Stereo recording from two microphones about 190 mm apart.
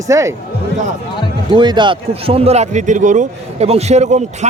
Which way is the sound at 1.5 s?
25° right (ahead or behind).